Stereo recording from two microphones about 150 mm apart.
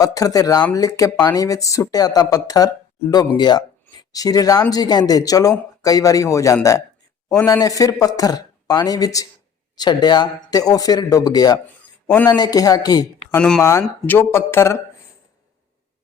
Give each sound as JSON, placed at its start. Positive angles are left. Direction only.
{"t": 0.0, "sound": "speech", "side_deg": 25}
{"t": 11.8, "sound": "a sound", "side_deg": 10}
{"t": 12.4, "sound": "speech", "side_deg": 25}
{"t": 13.3, "sound": "speech", "side_deg": 5}
{"t": 13.6, "sound": "speech", "side_deg": 20}